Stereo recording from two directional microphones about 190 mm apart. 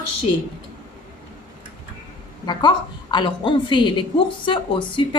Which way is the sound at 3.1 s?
25° left (ahead or behind).